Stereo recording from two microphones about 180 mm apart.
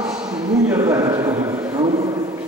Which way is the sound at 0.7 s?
20° right (ahead or behind).